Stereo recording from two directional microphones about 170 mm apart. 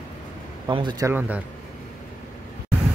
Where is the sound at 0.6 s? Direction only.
25° right (ahead or behind).